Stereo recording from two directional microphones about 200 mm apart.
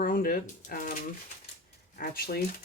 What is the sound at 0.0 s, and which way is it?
Speech, 45° left (ahead or behind).